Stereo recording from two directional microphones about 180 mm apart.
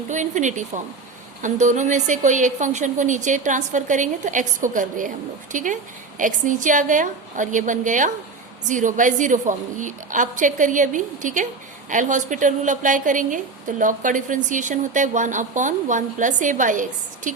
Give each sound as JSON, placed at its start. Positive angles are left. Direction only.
{"t": 0.1, "sound": "a woman's voice", "side_deg": -45}